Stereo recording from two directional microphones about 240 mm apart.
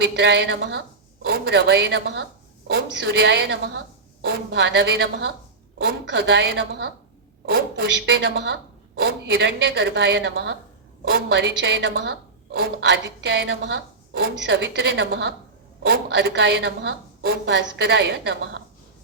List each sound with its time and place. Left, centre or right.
0.0 s a woman's voice: right